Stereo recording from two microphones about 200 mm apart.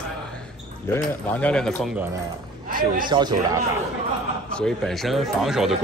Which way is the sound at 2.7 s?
45° right (ahead or behind).